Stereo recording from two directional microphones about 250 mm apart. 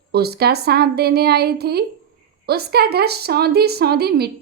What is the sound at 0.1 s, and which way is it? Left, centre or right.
A woman's voice, right.